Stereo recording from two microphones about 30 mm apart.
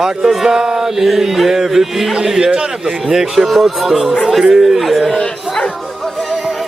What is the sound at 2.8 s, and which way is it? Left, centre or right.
Mantra, centre.